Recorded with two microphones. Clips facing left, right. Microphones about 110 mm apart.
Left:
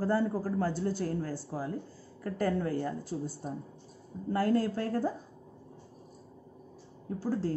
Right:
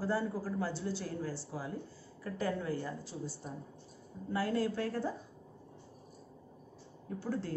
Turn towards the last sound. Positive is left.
turn(degrees=35)  # may be behind; listen again after turning